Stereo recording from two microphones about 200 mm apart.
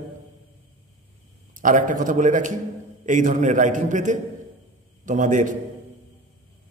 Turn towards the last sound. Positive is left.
turn(degrees=-40)  # may be behind; listen again after turning